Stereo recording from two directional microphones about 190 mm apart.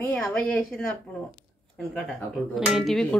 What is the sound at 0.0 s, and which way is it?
Speech, 10° left (ahead or behind).